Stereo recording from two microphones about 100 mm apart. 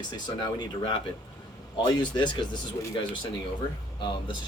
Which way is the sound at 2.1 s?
50° left (ahead or behind).